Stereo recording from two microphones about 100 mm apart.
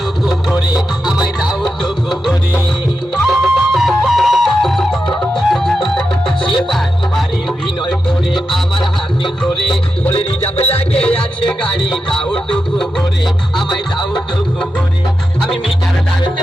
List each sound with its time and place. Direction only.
0.7 s music: 10° right (ahead or behind)
8.4 s music: 5° left (ahead or behind)
10.2 s music: 85° left
12.1 s music: 5° left (ahead or behind)